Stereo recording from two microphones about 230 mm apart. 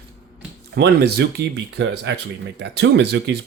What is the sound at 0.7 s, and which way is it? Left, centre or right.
Speech, right.